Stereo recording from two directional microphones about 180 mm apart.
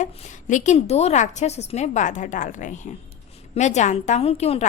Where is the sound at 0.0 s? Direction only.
45° left (ahead or behind).